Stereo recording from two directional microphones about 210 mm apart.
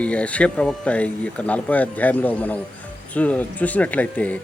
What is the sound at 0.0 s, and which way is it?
A man's voice, 5° left (ahead or behind).